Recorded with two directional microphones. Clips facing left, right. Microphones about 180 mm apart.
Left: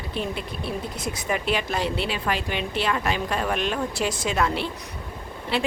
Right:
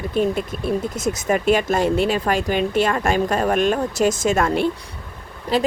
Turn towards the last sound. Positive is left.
turn(degrees=-40)  # may be behind; listen again after turning